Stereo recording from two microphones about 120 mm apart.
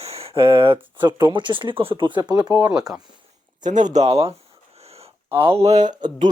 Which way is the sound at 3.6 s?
90° right.